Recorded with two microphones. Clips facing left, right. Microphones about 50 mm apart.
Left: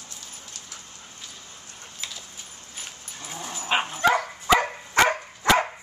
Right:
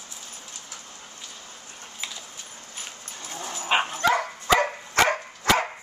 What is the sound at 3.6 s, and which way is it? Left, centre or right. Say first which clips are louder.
Dog: right 1 dB; centre.